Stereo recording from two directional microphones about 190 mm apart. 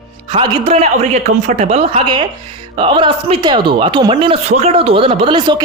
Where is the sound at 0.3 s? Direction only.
25° right (ahead or behind).